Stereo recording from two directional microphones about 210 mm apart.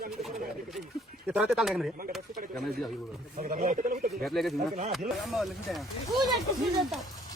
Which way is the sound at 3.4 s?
40° right (ahead or behind).